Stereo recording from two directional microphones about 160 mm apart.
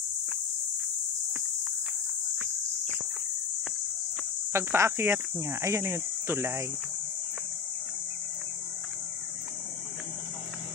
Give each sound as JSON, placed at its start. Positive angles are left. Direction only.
{"t": 4.5, "sound": "speech", "side_deg": -15}